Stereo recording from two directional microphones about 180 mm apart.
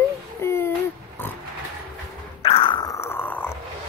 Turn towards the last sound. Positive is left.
turn(degrees=10)  # may be behind; listen again after turning